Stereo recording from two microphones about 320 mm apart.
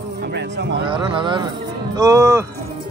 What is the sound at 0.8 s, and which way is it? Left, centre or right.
Speech, centre.